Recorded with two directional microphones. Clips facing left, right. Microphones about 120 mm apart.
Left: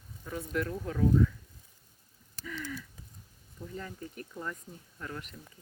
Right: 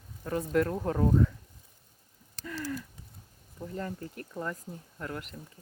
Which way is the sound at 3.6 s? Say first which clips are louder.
Right 4 dB; 80° right.